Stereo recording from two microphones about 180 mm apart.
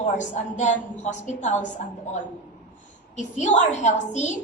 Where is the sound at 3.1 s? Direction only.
40° left (ahead or behind).